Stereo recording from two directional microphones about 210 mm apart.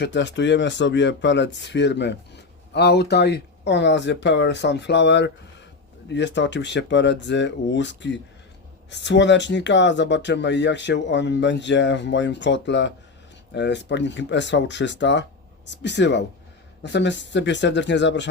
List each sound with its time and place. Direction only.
0.0 s speech: 55° left (ahead or behind)